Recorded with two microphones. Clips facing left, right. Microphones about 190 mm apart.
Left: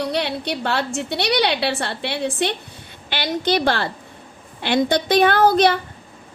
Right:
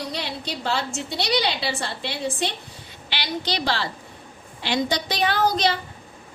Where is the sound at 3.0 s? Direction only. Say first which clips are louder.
Left 7 dB; 50° left (ahead or behind).